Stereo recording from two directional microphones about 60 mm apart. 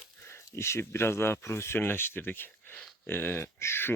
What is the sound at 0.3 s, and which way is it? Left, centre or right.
Speech, left.